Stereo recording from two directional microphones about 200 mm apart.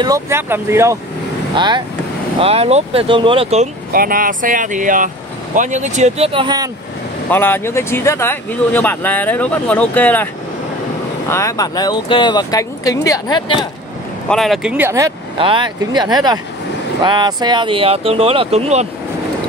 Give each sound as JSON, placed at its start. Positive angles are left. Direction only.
{"t": 0.0, "sound": "speech", "side_deg": -15}
{"t": 3.9, "sound": "speech", "side_deg": -45}
{"t": 7.2, "sound": "speech", "side_deg": 10}
{"t": 11.2, "sound": "speech", "side_deg": 15}
{"t": 14.3, "sound": "speech", "side_deg": 0}